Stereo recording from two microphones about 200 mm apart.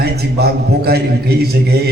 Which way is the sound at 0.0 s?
55° right (ahead or behind).